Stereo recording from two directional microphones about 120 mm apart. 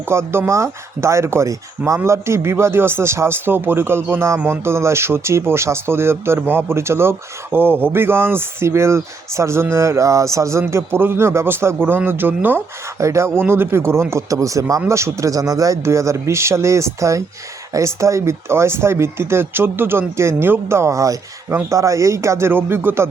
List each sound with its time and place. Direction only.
0.0 s speech: 20° right (ahead or behind)